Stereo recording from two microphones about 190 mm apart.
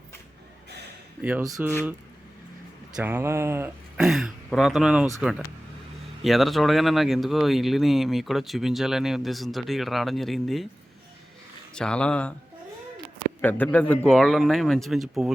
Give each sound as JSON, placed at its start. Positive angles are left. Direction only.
{"t": 1.2, "sound": "speech", "side_deg": -10}
{"t": 2.9, "sound": "speech", "side_deg": -10}
{"t": 6.2, "sound": "speech", "side_deg": 0}
{"t": 11.7, "sound": "speech", "side_deg": 5}
{"t": 13.4, "sound": "speech", "side_deg": 10}